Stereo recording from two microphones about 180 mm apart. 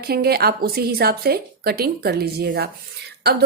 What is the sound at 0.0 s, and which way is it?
A woman's voice, 60° right (ahead or behind).